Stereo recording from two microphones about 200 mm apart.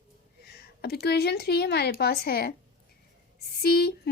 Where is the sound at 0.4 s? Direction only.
55° left (ahead or behind).